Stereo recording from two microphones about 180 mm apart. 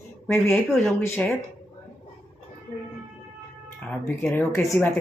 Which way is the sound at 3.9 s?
10° left (ahead or behind).